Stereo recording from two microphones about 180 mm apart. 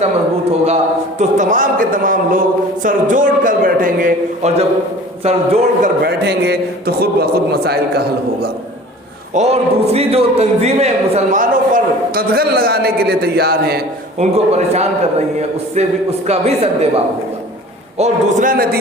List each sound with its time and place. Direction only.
1.2 s a man's voice: 45° right (ahead or behind)
6.0 s a man's voice: 65° right (ahead or behind)
9.3 s a man's voice: 35° right (ahead or behind); by 13.8 s 60° right (ahead or behind)
14.2 s a man's voice: 35° right (ahead or behind); by 18.8 s 55° right (ahead or behind)